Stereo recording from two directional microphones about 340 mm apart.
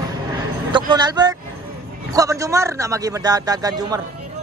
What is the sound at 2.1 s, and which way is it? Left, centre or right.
A man's voice, centre.